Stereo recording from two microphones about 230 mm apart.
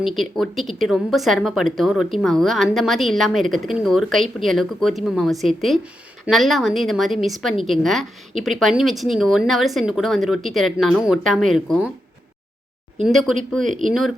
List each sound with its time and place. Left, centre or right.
0.0 s speech: centre
13.0 s speech: centre
13.7 s speech: right